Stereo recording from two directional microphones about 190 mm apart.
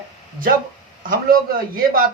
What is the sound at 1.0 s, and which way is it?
A man's voice, 50° right (ahead or behind).